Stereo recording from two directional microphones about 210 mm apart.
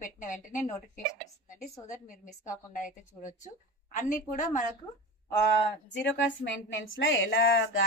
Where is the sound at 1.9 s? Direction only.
35° left (ahead or behind).